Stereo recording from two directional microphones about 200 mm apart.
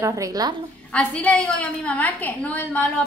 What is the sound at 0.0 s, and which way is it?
Speech, 15° right (ahead or behind).